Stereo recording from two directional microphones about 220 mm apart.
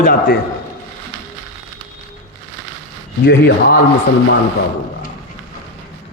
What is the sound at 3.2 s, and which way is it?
Speech, 50° left (ahead or behind).